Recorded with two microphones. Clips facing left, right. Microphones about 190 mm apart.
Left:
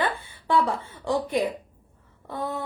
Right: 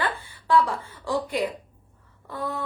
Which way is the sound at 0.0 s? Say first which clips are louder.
Left 2 dB; 20° left (ahead or behind).